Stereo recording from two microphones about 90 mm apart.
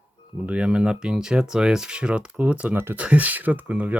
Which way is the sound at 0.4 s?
15° right (ahead or behind).